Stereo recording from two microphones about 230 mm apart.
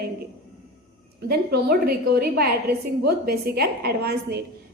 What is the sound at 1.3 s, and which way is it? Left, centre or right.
A woman's voice, right.